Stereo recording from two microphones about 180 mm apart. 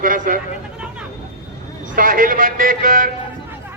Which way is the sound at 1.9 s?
50° right (ahead or behind).